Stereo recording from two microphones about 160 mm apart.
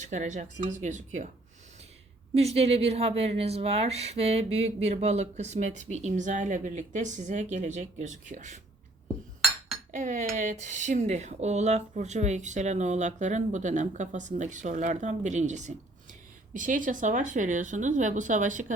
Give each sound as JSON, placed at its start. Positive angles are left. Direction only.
{"t": 0.0, "sound": "a woman's voice", "side_deg": -50}
{"t": 2.3, "sound": "a woman's voice", "side_deg": -40}
{"t": 9.9, "sound": "a woman's voice", "side_deg": -50}